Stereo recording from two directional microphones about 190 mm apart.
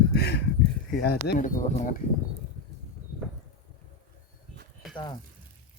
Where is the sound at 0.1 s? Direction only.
60° left (ahead or behind).